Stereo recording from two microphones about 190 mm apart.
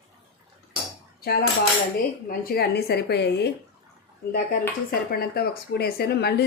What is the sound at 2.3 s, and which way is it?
A woman's voice, 55° left (ahead or behind).